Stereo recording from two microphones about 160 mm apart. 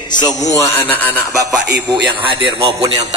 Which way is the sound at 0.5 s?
15° left (ahead or behind).